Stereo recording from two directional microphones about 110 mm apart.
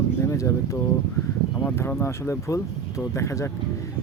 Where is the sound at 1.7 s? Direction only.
20° left (ahead or behind).